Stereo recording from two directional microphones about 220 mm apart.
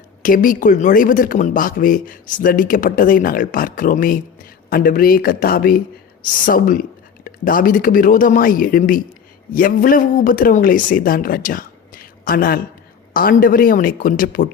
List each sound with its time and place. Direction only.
0.2 s speech: 40° left (ahead or behind)